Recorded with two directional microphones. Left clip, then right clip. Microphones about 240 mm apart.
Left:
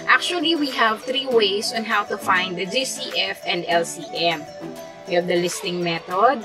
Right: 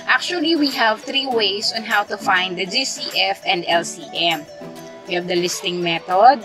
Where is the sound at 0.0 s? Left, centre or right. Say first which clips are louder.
Even; centre.